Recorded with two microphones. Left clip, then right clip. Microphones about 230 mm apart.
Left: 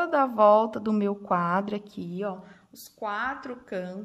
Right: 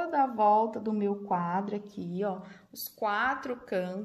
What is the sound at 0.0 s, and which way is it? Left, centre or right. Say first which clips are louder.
A woman's voice: left 5 dB; left.